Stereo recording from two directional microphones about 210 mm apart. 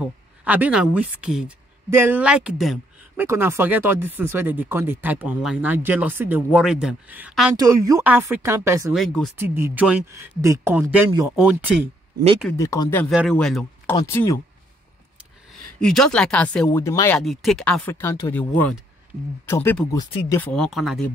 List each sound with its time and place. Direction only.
0.0 s speech: 5° right (ahead or behind)
3.3 s speech: 10° right (ahead or behind)
7.5 s speech: 15° right (ahead or behind)
8.9 s speech: centre (ahead or behind)
9.4 s speech: 10° right (ahead or behind)
12.5 s speech: 15° left (ahead or behind)
13.0 s speech: centre (ahead or behind)
13.9 s speech: 15° left (ahead or behind)
15.5 s speech: centre (ahead or behind)
17.2 s speech: centre (ahead or behind); by 20.2 s 20° left (ahead or behind)
20.2 s speech: 10° left (ahead or behind)